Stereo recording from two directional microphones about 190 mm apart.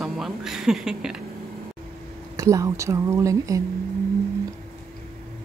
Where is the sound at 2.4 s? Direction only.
15° right (ahead or behind).